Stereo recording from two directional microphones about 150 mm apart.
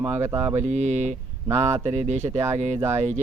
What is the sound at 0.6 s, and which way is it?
Speech, 50° right (ahead or behind).